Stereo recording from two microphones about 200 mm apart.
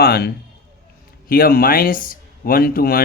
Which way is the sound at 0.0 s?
50° left (ahead or behind).